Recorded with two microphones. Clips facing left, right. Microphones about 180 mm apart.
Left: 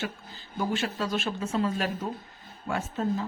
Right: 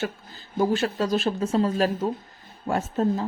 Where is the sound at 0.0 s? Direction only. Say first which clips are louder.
Right 5 dB; 40° right (ahead or behind).